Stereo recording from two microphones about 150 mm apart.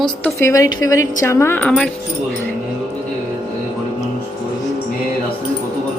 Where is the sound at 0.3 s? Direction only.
20° left (ahead or behind).